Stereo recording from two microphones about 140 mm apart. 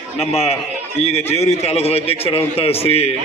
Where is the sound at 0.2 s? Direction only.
45° left (ahead or behind).